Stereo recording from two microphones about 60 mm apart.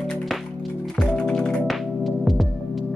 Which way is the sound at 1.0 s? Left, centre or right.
Centre.